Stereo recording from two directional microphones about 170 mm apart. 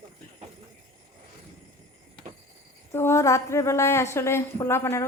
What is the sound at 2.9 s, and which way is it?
A woman's voice, 15° left (ahead or behind).